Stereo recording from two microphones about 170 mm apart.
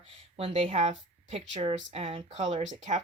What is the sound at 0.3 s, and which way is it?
Speech, 35° right (ahead or behind).